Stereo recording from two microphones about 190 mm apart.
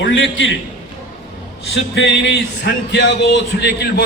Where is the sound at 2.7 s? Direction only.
60° left (ahead or behind).